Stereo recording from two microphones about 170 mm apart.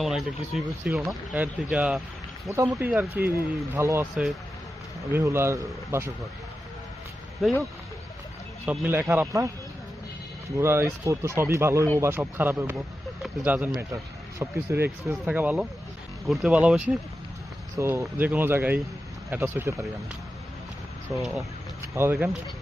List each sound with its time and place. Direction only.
0.0 s speech: centre (ahead or behind)
5.1 s speech: 15° right (ahead or behind)
8.6 s speech: 10° right (ahead or behind)
10.6 s speech: 15° right (ahead or behind)
21.2 s speech: centre (ahead or behind)
21.8 s speech: 15° right (ahead or behind)